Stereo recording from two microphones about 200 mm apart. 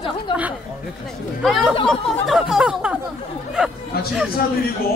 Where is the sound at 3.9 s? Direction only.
50° left (ahead or behind).